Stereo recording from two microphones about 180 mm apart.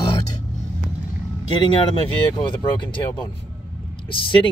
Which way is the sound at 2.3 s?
25° left (ahead or behind).